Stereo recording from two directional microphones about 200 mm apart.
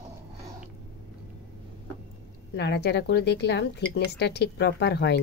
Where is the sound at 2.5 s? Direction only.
55° left (ahead or behind).